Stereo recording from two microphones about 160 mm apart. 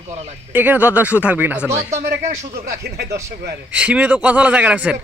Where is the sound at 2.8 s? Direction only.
90° right.